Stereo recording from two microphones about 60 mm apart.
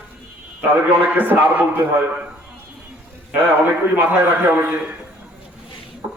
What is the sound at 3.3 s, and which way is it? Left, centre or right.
A man's voice, right.